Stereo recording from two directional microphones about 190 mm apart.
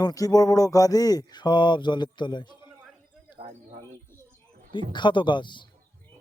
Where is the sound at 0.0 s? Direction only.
20° left (ahead or behind).